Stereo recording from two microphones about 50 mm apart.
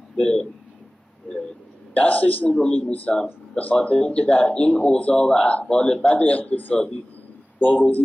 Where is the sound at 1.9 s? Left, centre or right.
Left.